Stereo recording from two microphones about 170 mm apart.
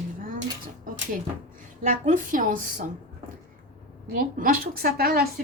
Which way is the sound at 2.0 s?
50° right (ahead or behind).